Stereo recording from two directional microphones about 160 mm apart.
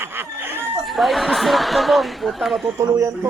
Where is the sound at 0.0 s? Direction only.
15° right (ahead or behind).